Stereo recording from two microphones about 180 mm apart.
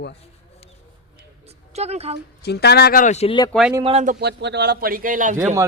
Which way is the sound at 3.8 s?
35° right (ahead or behind).